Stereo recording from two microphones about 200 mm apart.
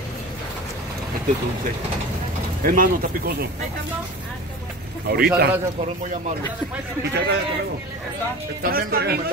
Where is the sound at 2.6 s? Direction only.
45° right (ahead or behind).